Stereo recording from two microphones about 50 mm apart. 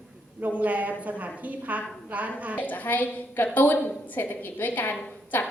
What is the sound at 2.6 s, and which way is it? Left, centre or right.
A woman's voice, left.